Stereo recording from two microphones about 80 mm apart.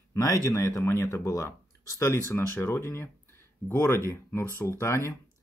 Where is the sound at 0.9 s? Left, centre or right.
Left.